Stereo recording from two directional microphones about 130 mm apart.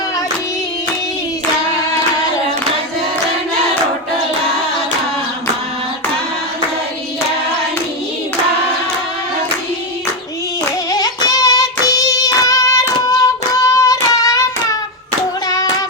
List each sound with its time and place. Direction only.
10.7 s music: 30° left (ahead or behind)